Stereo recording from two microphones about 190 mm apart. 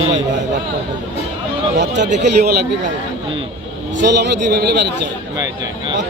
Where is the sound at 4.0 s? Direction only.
65° right (ahead or behind).